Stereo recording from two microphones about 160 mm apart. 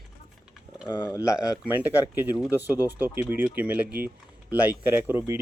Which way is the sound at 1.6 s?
10° right (ahead or behind).